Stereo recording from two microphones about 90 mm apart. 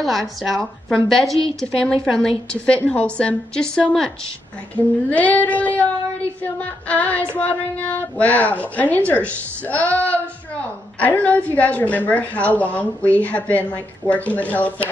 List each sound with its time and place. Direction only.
0.0 s a woman's voice: centre (ahead or behind)
2.0 s female singing: 5° left (ahead or behind)
5.1 s female singing: 15° left (ahead or behind)